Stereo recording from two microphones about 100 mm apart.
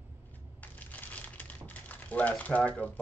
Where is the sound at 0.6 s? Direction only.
15° left (ahead or behind).